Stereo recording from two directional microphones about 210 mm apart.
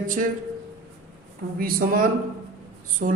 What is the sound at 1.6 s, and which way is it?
Speech, 45° right (ahead or behind).